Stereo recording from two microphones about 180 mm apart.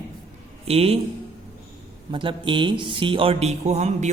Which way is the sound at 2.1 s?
25° right (ahead or behind).